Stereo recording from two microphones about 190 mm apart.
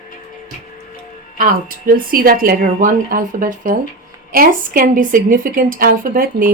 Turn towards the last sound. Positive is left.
turn(degrees=-45)  # may be behind; listen again after turning